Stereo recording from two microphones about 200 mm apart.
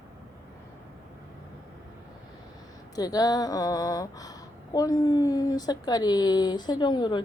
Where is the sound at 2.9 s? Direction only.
20° left (ahead or behind).